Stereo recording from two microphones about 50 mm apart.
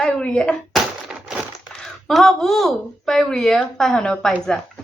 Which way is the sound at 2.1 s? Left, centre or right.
Centre.